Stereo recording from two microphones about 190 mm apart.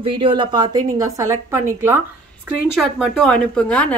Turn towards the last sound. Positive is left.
turn(degrees=5)  # may be behind; listen again after turning